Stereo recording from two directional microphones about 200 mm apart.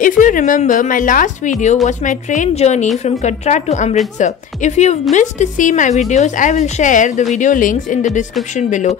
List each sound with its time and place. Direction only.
0.0 s a woman's voice: 40° left (ahead or behind)